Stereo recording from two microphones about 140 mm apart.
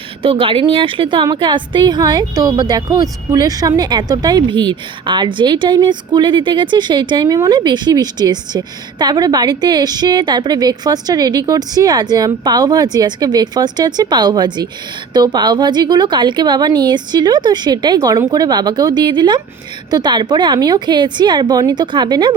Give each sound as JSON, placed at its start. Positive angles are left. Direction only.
{"t": 0.2, "sound": "a woman's voice", "side_deg": -40}